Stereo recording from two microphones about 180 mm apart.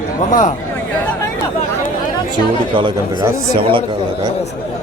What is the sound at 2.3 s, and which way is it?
Speech, 25° right (ahead or behind).